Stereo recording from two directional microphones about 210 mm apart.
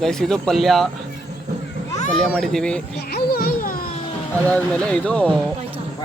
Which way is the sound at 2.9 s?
50° left (ahead or behind).